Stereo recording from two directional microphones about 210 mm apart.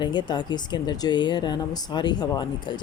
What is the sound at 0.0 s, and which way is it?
Speech, 20° left (ahead or behind).